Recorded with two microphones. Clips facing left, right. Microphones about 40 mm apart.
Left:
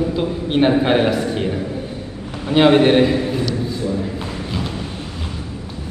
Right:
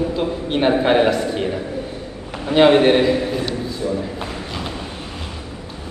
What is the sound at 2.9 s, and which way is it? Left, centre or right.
Speech, left.